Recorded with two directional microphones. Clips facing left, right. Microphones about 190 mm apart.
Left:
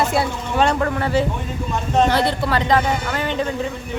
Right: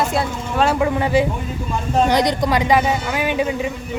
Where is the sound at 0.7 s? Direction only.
15° right (ahead or behind).